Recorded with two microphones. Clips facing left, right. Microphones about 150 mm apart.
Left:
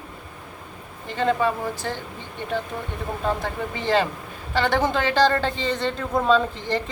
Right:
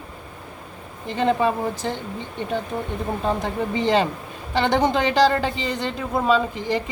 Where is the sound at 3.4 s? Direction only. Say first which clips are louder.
Right 4 dB; 20° right (ahead or behind).